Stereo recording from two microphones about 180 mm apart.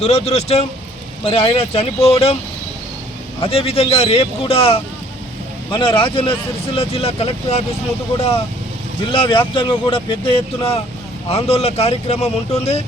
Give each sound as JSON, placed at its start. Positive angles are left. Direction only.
{"t": 0.0, "sound": "speech", "side_deg": 35}
{"t": 3.4, "sound": "speech", "side_deg": 30}
{"t": 9.0, "sound": "speech", "side_deg": 30}